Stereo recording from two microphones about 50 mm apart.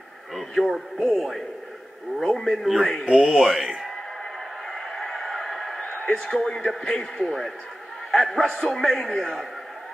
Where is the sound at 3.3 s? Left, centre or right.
Centre.